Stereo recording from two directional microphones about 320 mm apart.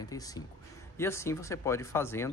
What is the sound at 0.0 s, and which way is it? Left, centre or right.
Speech, centre.